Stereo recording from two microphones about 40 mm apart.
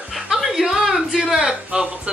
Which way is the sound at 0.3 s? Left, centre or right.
Centre.